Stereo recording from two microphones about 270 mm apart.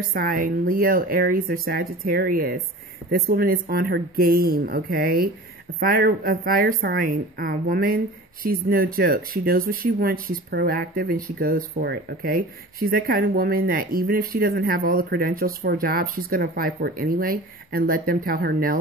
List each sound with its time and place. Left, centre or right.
0.1 s a woman's voice: right